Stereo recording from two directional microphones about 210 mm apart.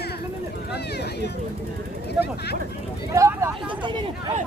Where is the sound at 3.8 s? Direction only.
20° right (ahead or behind).